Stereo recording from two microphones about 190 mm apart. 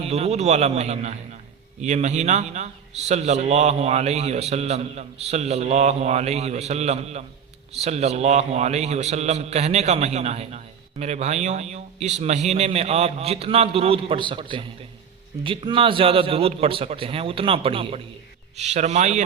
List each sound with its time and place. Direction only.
0.0 s a man's voice: 35° right (ahead or behind)